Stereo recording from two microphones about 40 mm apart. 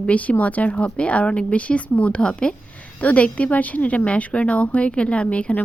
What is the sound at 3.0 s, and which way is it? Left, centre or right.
A woman's voice, left.